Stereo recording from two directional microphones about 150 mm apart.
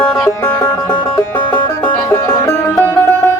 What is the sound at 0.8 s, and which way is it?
Music, 30° left (ahead or behind).